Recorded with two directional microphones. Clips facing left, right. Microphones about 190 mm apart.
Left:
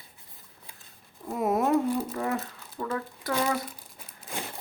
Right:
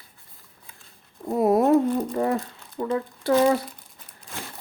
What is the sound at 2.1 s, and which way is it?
Speech, 35° right (ahead or behind).